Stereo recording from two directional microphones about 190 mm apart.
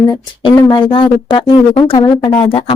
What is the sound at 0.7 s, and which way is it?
Speech, 25° left (ahead or behind).